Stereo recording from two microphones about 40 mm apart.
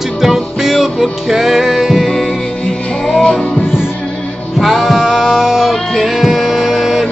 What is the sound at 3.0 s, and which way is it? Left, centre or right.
Music, centre.